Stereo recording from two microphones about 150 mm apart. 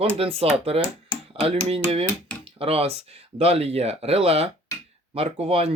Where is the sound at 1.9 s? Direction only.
40° right (ahead or behind).